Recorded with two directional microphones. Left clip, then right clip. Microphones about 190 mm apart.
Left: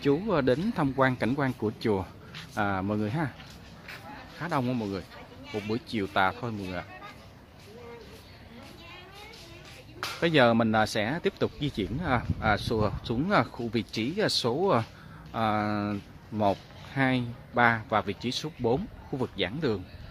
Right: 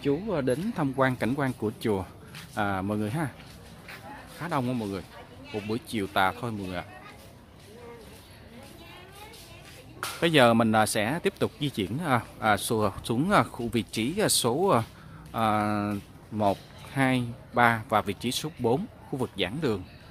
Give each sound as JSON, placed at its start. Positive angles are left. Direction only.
{"t": 0.0, "sound": "speech", "side_deg": 15}
{"t": 0.9, "sound": "speech", "side_deg": 0}
{"t": 4.4, "sound": "speech", "side_deg": 0}
{"t": 10.2, "sound": "speech", "side_deg": -10}